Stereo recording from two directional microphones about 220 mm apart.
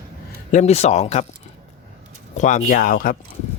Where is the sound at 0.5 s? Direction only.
30° left (ahead or behind).